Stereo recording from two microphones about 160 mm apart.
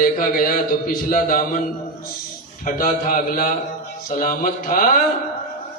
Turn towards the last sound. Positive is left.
turn(degrees=60)  # may be behind; listen again after turning